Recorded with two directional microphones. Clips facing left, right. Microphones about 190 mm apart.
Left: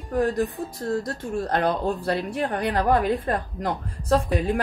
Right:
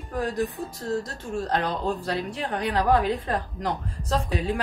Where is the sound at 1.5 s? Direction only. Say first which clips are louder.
Left 3 dB; 55° left (ahead or behind).